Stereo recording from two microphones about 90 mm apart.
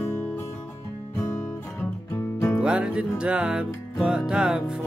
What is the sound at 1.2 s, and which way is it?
Guitar, 30° left (ahead or behind).